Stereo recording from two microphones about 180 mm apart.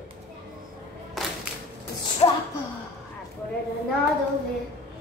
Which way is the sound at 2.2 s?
25° left (ahead or behind).